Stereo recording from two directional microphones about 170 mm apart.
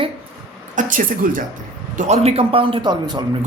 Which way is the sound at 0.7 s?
50° right (ahead or behind).